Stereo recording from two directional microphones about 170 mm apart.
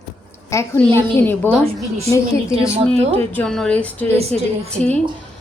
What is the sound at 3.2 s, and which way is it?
A woman's voice, 10° left (ahead or behind).